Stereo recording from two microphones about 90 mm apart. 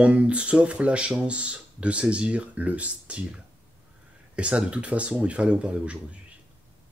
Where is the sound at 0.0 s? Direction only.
15° right (ahead or behind).